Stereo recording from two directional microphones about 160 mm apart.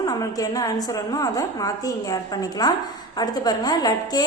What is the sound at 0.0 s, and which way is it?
A woman's voice, 20° left (ahead or behind).